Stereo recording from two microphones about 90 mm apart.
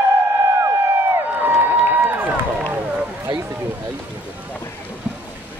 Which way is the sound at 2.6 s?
10° right (ahead or behind).